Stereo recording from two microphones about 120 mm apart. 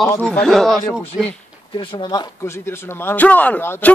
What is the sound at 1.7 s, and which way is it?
Speech, 40° left (ahead or behind).